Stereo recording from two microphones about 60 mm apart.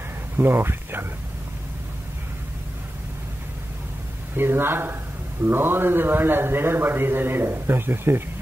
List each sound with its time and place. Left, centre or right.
0.4 s a man's voice: right
4.4 s a man's voice: right